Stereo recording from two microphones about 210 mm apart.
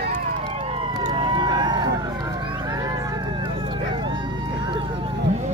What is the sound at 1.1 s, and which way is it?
Run, 20° right (ahead or behind).